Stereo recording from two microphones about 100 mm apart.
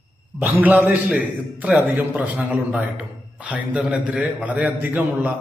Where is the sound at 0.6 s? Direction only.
15° right (ahead or behind).